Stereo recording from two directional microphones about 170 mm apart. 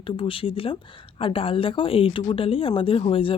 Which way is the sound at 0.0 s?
30° left (ahead or behind).